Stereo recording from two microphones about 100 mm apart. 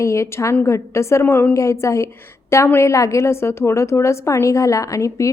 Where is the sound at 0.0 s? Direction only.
30° left (ahead or behind).